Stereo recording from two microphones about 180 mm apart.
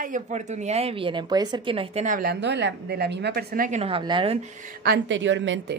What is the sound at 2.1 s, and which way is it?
A woman's voice, 55° right (ahead or behind).